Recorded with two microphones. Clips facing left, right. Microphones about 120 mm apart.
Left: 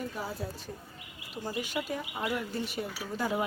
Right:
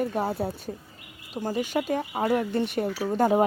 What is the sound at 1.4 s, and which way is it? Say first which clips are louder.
Speech: right 8 dB; 45° right (ahead or behind).